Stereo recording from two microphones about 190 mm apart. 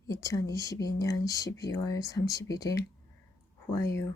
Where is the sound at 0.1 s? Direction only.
15° left (ahead or behind).